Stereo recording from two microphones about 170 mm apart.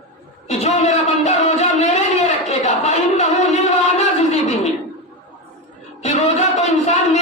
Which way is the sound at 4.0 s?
40° left (ahead or behind).